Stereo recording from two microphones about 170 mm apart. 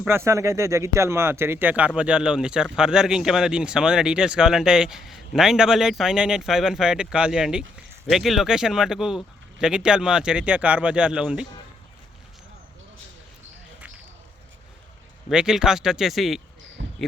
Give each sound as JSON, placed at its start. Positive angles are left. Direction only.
{"t": 0.1, "sound": "speech", "side_deg": -15}
{"t": 15.3, "sound": "speech", "side_deg": -5}
{"t": 16.8, "sound": "a sound", "side_deg": -90}